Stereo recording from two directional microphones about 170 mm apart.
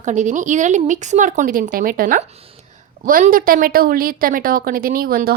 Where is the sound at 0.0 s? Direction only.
45° right (ahead or behind).